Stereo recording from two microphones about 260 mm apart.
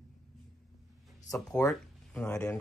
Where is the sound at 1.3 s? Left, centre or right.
Centre.